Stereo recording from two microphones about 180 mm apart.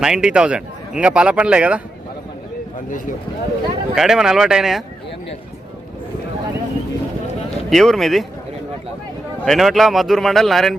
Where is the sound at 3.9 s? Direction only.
Centre (ahead or behind).